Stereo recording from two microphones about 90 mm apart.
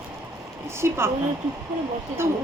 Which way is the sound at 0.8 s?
30° right (ahead or behind).